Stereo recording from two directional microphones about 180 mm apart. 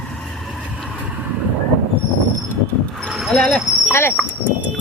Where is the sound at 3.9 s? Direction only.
15° left (ahead or behind).